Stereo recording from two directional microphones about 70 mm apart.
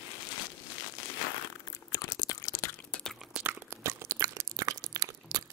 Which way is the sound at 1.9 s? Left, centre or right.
Left.